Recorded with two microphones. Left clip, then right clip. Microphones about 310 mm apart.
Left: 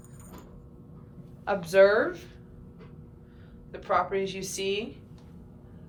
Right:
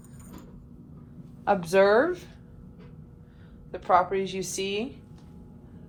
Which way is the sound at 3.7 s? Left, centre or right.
Centre.